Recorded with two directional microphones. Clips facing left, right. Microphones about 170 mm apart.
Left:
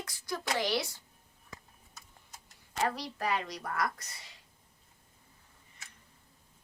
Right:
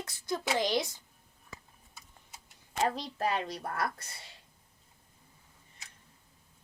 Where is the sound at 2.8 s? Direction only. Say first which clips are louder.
Right 2 dB; 25° right (ahead or behind).